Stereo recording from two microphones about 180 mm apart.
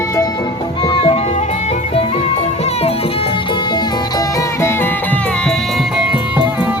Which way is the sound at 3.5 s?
20° left (ahead or behind).